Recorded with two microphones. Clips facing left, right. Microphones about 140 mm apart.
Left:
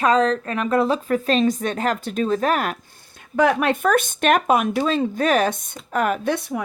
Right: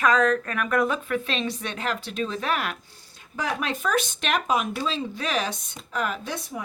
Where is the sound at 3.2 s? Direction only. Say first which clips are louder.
Left 11 dB; 60° left (ahead or behind).